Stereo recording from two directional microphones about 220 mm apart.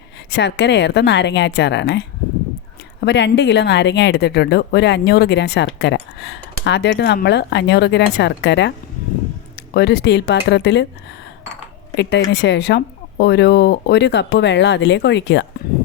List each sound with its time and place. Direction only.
0.3 s speech: 50° left (ahead or behind)
9.7 s speech: 45° left (ahead or behind)
11.9 s speech: 50° left (ahead or behind)